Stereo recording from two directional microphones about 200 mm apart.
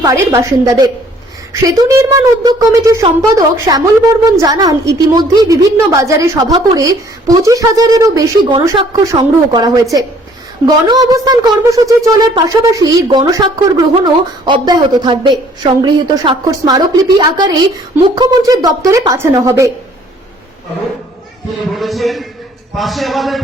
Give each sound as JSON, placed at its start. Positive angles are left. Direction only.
{"t": 0.0, "sound": "a woman's voice", "side_deg": -15}
{"t": 10.8, "sound": "a woman's voice", "side_deg": -20}
{"t": 21.8, "sound": "a man's voice", "side_deg": 0}